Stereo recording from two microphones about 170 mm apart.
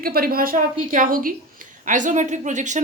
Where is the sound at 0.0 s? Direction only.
60° right (ahead or behind).